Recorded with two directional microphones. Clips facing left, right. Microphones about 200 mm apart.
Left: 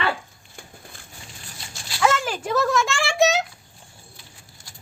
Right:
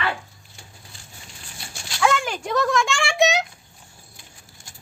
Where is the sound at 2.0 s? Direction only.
Centre (ahead or behind).